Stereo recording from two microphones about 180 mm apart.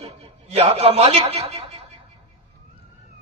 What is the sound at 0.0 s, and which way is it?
Chuckle, 35° right (ahead or behind).